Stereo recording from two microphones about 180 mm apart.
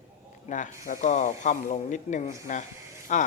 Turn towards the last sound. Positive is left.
turn(degrees=45)  # may be behind; listen again after turning